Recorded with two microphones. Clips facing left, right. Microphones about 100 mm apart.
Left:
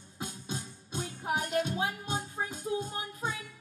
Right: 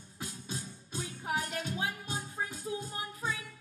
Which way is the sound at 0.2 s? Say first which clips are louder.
Left 3 dB; 25° left (ahead or behind).